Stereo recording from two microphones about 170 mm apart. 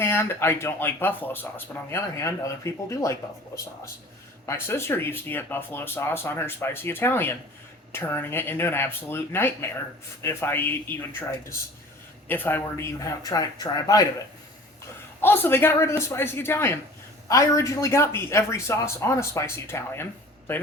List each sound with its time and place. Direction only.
0.0 s speech: 15° left (ahead or behind)
15.2 s speech: 10° left (ahead or behind)